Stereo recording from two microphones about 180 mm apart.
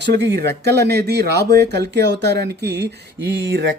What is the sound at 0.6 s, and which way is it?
Speech, 65° right (ahead or behind).